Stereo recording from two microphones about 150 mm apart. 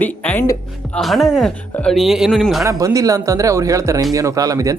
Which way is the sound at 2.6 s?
20° right (ahead or behind).